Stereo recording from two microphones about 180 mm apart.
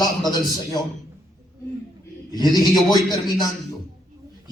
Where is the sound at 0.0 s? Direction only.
20° left (ahead or behind).